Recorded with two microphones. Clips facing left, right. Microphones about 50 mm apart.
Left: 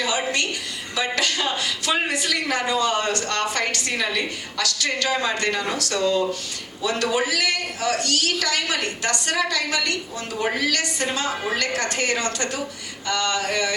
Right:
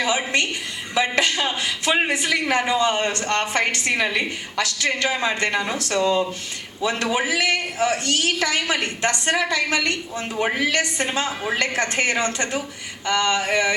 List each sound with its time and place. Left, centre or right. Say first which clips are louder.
0.0 s a woman's voice: right 2 dB; right